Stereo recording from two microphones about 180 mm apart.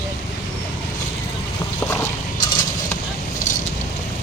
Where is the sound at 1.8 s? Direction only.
15° left (ahead or behind).